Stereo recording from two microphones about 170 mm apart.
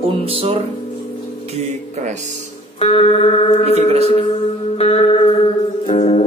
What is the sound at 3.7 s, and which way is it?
Speech, 40° right (ahead or behind).